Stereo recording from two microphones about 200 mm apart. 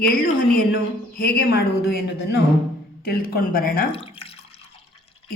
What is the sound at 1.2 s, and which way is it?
Speech, 50° left (ahead or behind).